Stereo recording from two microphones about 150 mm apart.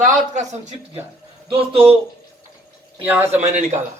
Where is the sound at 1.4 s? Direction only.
40° right (ahead or behind).